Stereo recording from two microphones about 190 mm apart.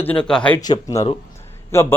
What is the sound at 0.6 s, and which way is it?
A man's voice, 20° left (ahead or behind).